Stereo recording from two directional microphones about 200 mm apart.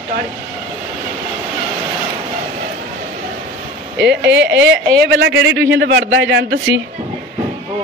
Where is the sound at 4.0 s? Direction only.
60° right (ahead or behind).